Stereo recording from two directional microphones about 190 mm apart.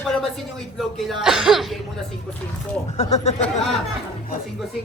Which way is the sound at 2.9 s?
35° left (ahead or behind).